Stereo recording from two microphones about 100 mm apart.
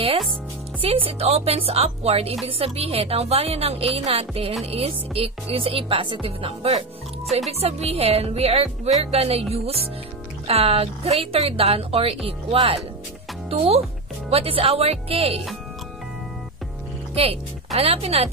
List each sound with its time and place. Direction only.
0.7 s speech: 65° right (ahead or behind)
7.6 s speech: 90° right; by 12.8 s 65° right (ahead or behind)
13.5 s speech: 90° right
14.3 s speech: 70° right (ahead or behind)
17.1 s speech: 80° right